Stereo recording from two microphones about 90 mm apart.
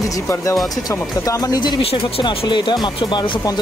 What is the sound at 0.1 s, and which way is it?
Speech, 35° left (ahead or behind).